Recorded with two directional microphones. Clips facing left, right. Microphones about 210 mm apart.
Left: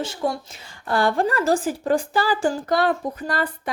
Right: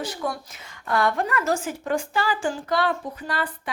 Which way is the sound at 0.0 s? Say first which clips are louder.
Left 4 dB; 25° left (ahead or behind).